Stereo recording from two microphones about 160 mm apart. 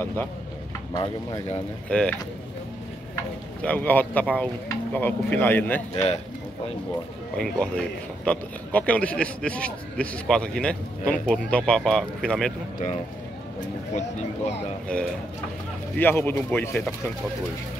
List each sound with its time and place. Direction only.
0.0 s a man's voice: 15° left (ahead or behind)
0.9 s speech: 25° left (ahead or behind)
1.9 s a man's voice: 5° left (ahead or behind)
3.6 s a man's voice: 10° left (ahead or behind)
7.3 s a man's voice: 5° left (ahead or behind)
14.9 s a man's voice: 5° left (ahead or behind)